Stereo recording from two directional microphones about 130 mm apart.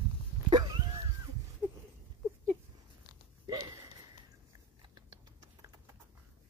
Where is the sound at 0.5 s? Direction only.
35° right (ahead or behind).